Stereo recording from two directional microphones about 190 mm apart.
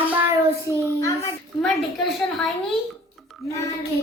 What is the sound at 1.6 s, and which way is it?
Speech, 5° left (ahead or behind).